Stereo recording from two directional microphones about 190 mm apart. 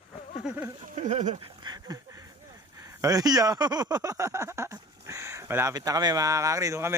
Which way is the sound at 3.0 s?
20° right (ahead or behind).